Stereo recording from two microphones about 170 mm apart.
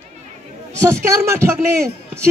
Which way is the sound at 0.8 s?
15° right (ahead or behind).